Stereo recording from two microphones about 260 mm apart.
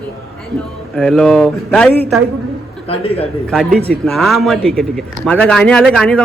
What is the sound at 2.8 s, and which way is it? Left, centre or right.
Speech, left.